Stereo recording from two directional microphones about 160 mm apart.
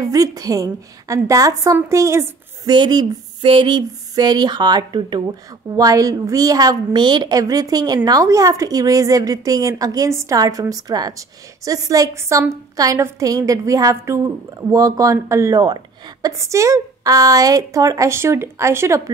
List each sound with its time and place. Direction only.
0.0 s a woman's voice: 20° right (ahead or behind)